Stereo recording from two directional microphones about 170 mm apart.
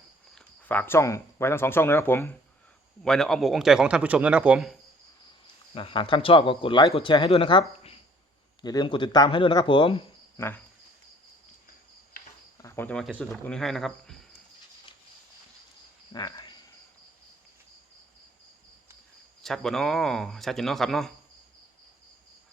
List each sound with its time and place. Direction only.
0.3 s speech: 10° left (ahead or behind)
5.7 s speech: 30° left (ahead or behind)
10.3 s speech: 15° left (ahead or behind)
12.6 s speech: 15° left (ahead or behind)
16.1 s cricket: 25° left (ahead or behind)
19.4 s speech: centre (ahead or behind)